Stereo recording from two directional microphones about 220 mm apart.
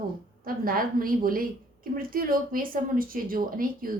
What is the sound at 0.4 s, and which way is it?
A woman's voice, 40° right (ahead or behind).